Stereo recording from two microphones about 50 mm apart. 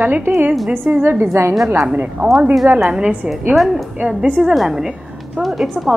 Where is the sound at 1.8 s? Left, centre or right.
Right.